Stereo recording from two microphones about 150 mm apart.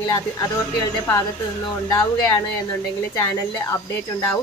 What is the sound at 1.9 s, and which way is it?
Speech, 20° left (ahead or behind).